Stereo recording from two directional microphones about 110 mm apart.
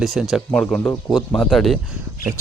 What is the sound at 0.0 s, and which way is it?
Speech, centre (ahead or behind).